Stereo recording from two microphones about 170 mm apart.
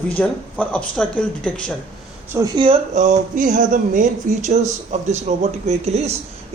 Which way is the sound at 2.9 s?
45° right (ahead or behind).